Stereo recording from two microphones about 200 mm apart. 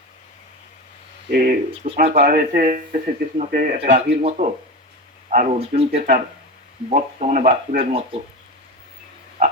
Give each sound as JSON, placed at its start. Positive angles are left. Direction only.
{"t": 1.3, "sound": "speech", "side_deg": -45}
{"t": 7.9, "sound": "speech", "side_deg": -30}